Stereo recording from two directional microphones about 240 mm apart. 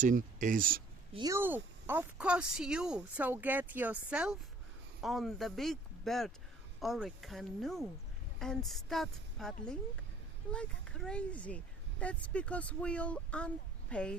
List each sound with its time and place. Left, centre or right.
0.0 s speech: right
1.1 s speech: centre